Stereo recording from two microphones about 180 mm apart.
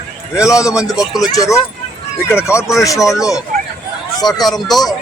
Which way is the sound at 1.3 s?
20° left (ahead or behind).